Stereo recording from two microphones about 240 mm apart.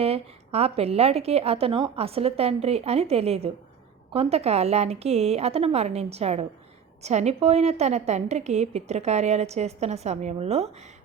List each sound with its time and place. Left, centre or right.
0.0 s a woman's voice: right